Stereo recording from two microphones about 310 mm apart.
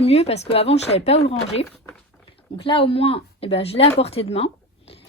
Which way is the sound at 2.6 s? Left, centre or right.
Centre.